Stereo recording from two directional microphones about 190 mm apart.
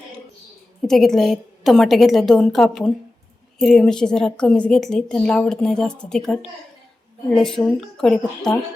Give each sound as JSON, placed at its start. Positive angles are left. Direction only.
{"t": 0.8, "sound": "a woman's voice", "side_deg": 0}